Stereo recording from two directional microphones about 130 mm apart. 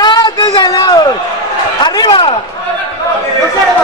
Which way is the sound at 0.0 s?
35° left (ahead or behind).